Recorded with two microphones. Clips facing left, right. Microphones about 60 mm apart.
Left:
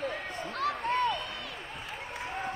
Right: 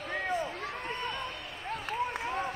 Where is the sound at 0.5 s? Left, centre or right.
Left.